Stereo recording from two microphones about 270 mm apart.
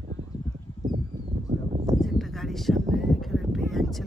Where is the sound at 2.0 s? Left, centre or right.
Centre.